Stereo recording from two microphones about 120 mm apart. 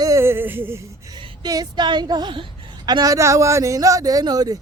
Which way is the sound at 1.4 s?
35° right (ahead or behind).